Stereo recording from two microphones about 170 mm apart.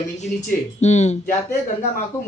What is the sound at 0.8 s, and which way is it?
Speech, 40° left (ahead or behind).